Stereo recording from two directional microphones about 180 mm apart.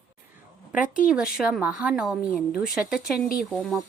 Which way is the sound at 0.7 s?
45° left (ahead or behind).